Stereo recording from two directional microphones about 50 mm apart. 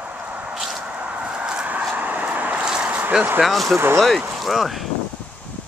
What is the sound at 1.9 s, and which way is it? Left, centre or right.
Vehicle, right.